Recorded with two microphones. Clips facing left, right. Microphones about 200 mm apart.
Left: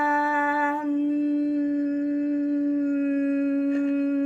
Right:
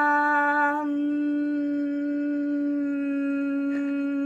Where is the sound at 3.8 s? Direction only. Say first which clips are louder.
Left 2 dB; centre (ahead or behind).